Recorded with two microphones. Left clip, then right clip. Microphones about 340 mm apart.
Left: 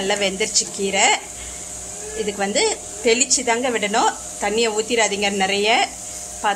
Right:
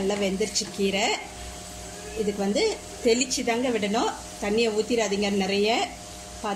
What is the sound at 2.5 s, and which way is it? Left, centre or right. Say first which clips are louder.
A woman's voice: left 5 dB; left.